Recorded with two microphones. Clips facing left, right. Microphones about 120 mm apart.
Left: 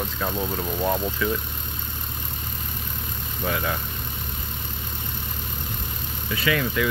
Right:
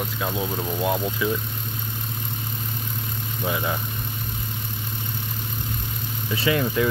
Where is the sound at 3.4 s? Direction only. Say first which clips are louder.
Even; 10° right (ahead or behind).